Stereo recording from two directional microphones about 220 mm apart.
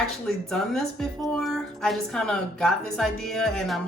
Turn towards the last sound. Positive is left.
turn(degrees=0)  # may be behind; listen again after turning